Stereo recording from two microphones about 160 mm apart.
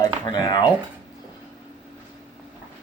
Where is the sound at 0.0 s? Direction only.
25° left (ahead or behind).